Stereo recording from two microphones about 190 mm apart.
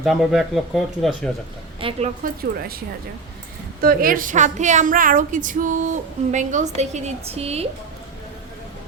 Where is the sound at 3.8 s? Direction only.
50° right (ahead or behind); by 7.6 s 35° right (ahead or behind).